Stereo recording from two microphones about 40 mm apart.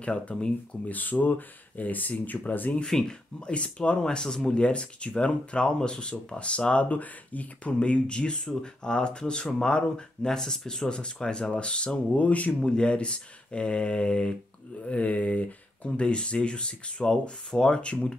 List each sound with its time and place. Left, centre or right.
0.0 s speech: left
2.8 s speech: centre
4.0 s speech: centre
10.9 s speech: left
12.6 s speech: left